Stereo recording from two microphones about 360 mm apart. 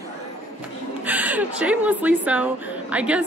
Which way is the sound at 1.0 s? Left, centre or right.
Centre.